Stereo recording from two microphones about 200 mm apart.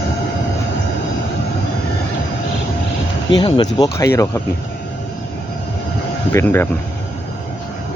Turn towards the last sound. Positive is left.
turn(degrees=10)  # may be behind; listen again after turning